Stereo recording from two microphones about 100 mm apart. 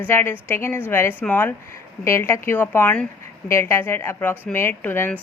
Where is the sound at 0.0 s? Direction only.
20° left (ahead or behind).